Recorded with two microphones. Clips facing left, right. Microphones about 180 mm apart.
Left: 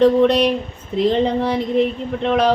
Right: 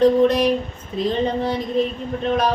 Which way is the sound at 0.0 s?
65° left (ahead or behind).